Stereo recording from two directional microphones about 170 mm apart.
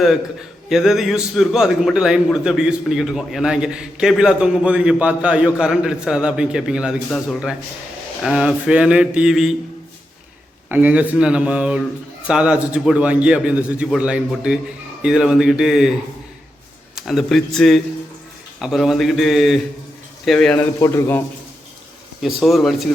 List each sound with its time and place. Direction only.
0.7 s a man's voice: 5° right (ahead or behind)
8.2 s a man's voice: 5° right (ahead or behind)
10.7 s a man's voice: 10° right (ahead or behind)
16.9 s a man's voice: centre (ahead or behind)
20.8 s a man's voice: 15° left (ahead or behind)
22.2 s a man's voice: centre (ahead or behind)